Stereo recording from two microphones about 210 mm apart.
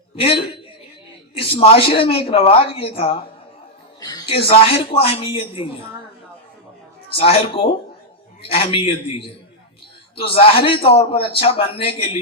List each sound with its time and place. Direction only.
0.2 s a man's voice: 25° left (ahead or behind)
7.1 s a man's voice: 25° left (ahead or behind)